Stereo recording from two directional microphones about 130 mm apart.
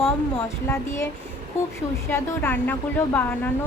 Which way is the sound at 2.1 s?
15° left (ahead or behind).